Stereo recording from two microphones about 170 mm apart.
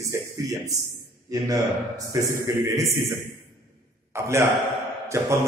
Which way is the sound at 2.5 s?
20° right (ahead or behind).